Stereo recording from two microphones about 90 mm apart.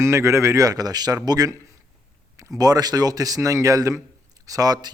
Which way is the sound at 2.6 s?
45° right (ahead or behind).